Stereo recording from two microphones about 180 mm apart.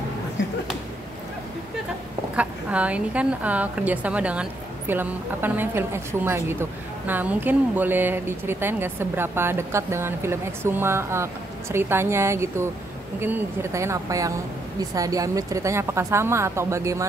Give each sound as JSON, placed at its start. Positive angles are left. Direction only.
{"t": 2.3, "sound": "a woman's voice", "side_deg": -5}